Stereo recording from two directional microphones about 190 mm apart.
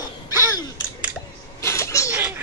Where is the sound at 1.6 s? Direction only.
15° left (ahead or behind).